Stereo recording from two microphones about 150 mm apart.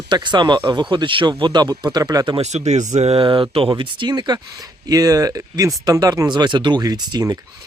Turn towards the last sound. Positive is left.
turn(degrees=-25)  # may be behind; listen again after turning